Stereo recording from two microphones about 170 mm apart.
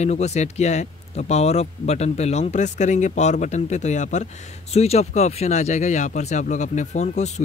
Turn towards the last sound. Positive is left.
turn(degrees=45)  # may be behind; listen again after turning